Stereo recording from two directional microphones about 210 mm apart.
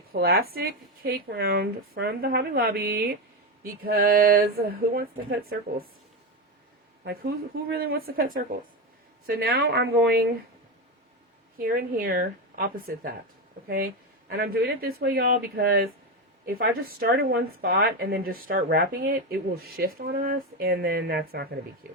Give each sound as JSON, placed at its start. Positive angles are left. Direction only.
{"t": 0.1, "sound": "speech", "side_deg": -45}
{"t": 7.0, "sound": "speech", "side_deg": -45}
{"t": 11.6, "sound": "speech", "side_deg": -45}